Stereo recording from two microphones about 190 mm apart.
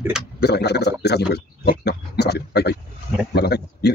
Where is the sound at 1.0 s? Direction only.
60° left (ahead or behind).